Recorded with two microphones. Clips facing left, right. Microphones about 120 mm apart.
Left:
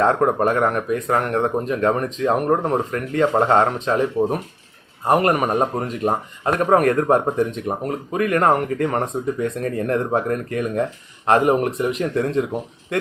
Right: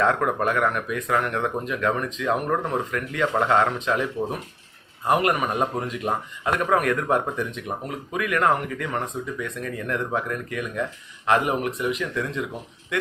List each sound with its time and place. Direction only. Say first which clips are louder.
0.0 s speech: left 5 dB; 35° left (ahead or behind)